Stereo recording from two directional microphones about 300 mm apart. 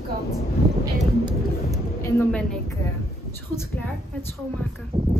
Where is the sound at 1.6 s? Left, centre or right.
Centre.